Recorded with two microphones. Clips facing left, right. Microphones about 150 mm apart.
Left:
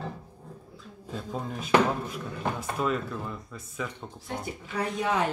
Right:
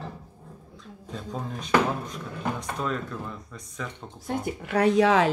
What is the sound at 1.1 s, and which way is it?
Speech, 5° left (ahead or behind).